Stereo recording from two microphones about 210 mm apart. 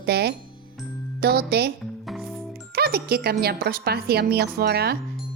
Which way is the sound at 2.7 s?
50° right (ahead or behind).